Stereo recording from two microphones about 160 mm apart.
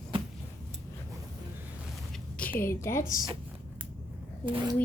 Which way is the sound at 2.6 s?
15° left (ahead or behind).